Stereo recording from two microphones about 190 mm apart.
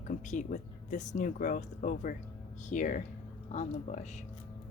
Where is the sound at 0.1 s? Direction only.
40° left (ahead or behind).